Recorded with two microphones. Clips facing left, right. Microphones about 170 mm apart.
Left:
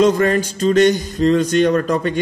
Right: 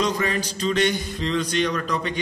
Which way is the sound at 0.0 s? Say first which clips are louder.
Left 10 dB; 50° left (ahead or behind).